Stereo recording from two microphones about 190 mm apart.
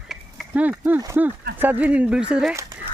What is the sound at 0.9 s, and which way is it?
Speech, 15° right (ahead or behind).